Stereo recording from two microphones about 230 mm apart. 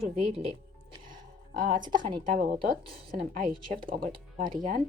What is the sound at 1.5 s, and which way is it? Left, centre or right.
Speech, right.